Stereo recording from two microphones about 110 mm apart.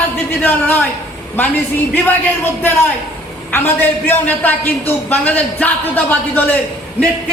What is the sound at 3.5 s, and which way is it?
A man's voice, 20° left (ahead or behind).